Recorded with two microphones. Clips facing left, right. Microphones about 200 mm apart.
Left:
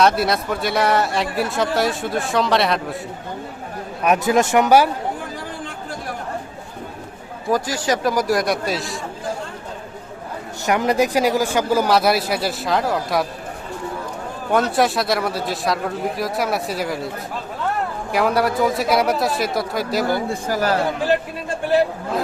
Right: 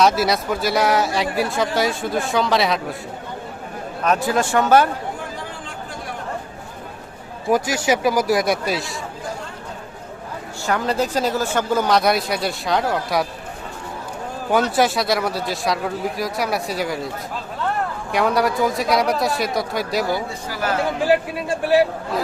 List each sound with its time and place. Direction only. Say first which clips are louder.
0.0 s speech: even; centre (ahead or behind)
4.0 s speech: left 3 dB; 15° left (ahead or behind)
7.5 s speech: right 2 dB; 10° right (ahead or behind)
10.7 s speech: left 3 dB; 15° left (ahead or behind)
14.5 s speech: even; centre (ahead or behind)
18.1 s speech: even; centre (ahead or behind)
20.3 s speech: left 4 dB; 45° left (ahead or behind)
21.0 s a man's voice: right 2 dB; 10° right (ahead or behind)